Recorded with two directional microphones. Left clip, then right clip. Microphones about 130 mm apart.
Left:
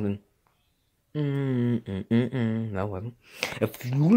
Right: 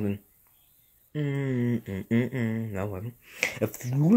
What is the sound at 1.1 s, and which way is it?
Speech, 25° left (ahead or behind).